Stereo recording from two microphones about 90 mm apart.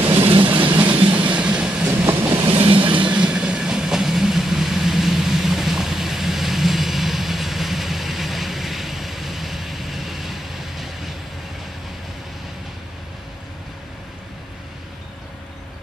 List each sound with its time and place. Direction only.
0.2 s a sound: 70° right (ahead or behind)
0.7 s train: 15° right (ahead or behind)
2.4 s train: 75° right (ahead or behind)
3.1 s train: 10° right (ahead or behind)